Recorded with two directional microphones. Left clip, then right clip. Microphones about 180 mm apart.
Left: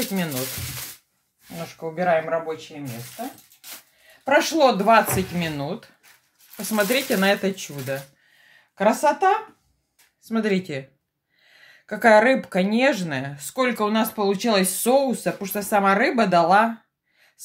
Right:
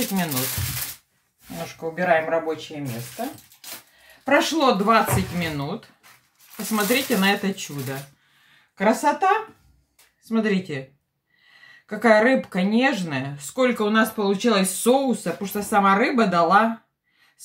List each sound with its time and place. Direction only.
0.1 s speech: 15° left (ahead or behind)
2.0 s speech: 20° left (ahead or behind)
4.2 s speech: 35° left (ahead or behind)
8.7 s speech: 35° left (ahead or behind)